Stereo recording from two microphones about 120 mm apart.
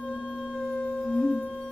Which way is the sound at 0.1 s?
5° left (ahead or behind).